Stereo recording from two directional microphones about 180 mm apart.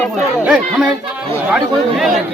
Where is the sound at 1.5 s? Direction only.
Centre (ahead or behind).